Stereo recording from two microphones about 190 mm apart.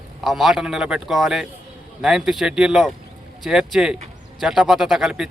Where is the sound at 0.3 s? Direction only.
Centre (ahead or behind).